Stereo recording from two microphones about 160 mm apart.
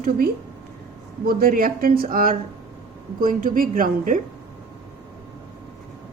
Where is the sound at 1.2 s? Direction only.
65° right (ahead or behind).